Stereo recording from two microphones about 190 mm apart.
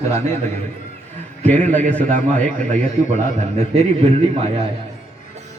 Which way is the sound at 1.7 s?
40° right (ahead or behind).